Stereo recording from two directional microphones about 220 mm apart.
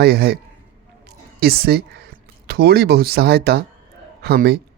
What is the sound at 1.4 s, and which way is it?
Speech, 45° right (ahead or behind).